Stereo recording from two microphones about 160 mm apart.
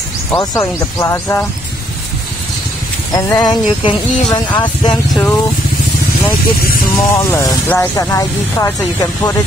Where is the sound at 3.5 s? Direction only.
30° left (ahead or behind).